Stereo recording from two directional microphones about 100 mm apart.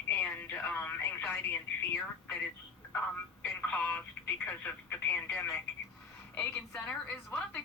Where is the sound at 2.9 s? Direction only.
15° left (ahead or behind).